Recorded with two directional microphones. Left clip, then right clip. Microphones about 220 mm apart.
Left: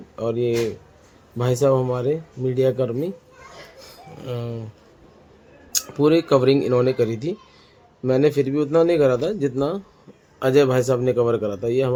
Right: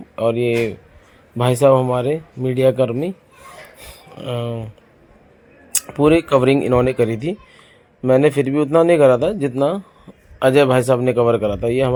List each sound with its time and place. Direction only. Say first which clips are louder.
0.2 s speech: right 5 dB; 15° right (ahead or behind)
4.2 s speech: right 6 dB; 15° right (ahead or behind)
6.0 s speech: right 3 dB; 10° right (ahead or behind)